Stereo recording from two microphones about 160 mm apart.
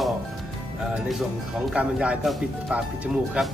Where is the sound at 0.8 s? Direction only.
5° right (ahead or behind).